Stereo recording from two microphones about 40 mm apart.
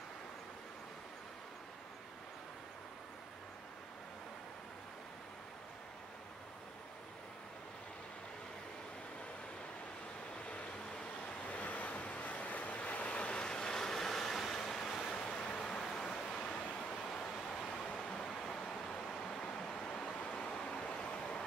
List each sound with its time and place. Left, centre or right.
11.4 s vehicle: left